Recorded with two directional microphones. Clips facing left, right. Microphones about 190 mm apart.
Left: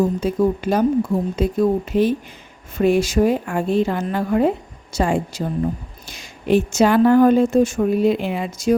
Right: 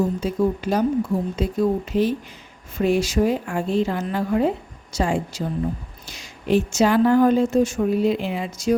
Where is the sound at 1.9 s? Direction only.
55° left (ahead or behind).